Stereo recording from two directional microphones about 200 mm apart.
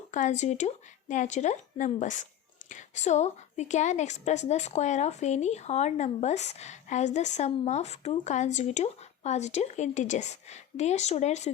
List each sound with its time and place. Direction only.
0.1 s a woman's voice: 40° left (ahead or behind)